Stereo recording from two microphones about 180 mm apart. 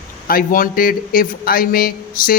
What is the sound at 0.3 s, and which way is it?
A man's voice, 50° left (ahead or behind).